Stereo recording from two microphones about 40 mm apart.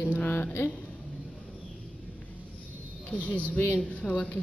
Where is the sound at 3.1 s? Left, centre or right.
Left.